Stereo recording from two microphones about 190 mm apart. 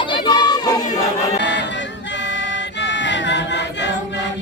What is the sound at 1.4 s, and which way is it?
Choir, 65° left (ahead or behind).